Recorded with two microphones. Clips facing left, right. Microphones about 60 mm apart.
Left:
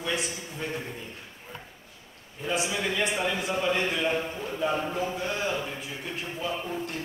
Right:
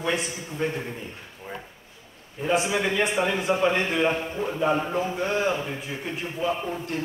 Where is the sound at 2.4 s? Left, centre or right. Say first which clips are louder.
Right 5 dB; right.